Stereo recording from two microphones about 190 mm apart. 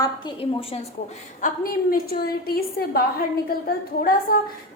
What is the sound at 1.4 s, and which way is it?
A woman's voice, 50° left (ahead or behind).